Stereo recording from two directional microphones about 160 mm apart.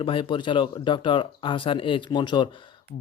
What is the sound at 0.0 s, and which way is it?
A man's voice, 35° left (ahead or behind).